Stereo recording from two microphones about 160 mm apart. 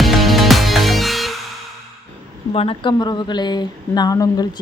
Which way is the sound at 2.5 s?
35° left (ahead or behind).